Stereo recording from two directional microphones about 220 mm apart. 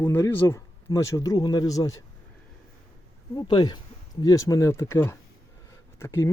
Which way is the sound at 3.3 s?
20° left (ahead or behind).